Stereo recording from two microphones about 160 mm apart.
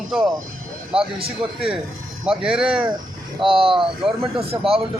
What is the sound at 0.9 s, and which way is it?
Speech, 35° right (ahead or behind).